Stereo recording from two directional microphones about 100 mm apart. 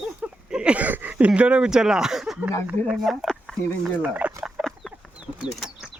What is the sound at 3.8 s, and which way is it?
Speech, 15° right (ahead or behind).